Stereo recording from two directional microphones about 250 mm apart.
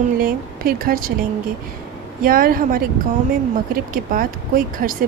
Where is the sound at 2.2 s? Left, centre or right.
Right.